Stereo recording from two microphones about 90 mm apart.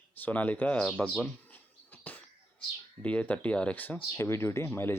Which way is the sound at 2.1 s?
20° left (ahead or behind).